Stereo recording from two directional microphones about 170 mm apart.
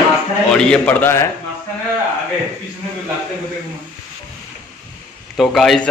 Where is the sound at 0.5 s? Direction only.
5° left (ahead or behind).